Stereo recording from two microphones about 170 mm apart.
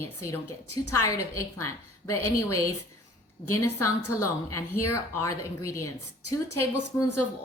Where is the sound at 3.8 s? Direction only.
15° left (ahead or behind).